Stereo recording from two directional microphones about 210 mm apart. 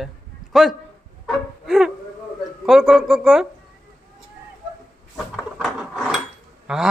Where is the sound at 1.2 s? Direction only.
Centre (ahead or behind).